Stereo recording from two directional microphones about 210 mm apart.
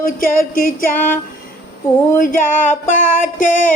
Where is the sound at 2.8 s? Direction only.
40° left (ahead or behind).